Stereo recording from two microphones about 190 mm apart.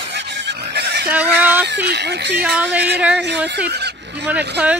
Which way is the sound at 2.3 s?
5° right (ahead or behind).